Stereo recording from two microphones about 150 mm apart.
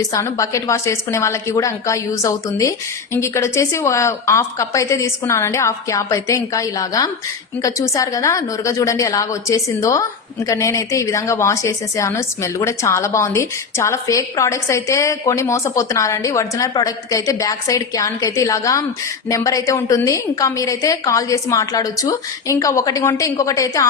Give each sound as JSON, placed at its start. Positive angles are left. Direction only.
{"t": 0.0, "sound": "a woman's voice", "side_deg": 20}